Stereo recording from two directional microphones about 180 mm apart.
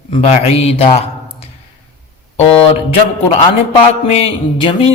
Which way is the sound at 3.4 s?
30° left (ahead or behind).